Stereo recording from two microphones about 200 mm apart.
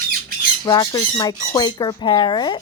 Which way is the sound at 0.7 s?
20° left (ahead or behind).